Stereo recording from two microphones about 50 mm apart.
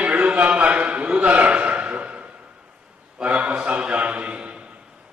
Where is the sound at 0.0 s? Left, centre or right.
Right.